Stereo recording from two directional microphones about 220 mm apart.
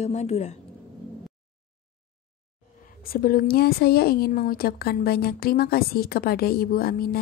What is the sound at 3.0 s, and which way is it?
Speech, 40° left (ahead or behind).